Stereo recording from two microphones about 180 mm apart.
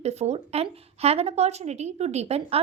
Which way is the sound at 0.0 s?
35° right (ahead or behind).